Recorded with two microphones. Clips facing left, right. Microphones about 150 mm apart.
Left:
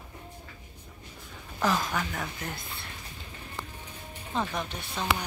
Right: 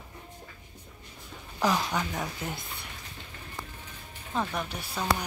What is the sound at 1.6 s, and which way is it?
A woman's voice, 15° right (ahead or behind).